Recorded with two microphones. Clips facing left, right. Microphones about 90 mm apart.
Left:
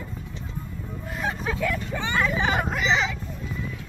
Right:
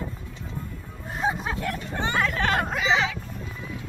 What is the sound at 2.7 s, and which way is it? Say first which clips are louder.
Vehicle: even; centre (ahead or behind).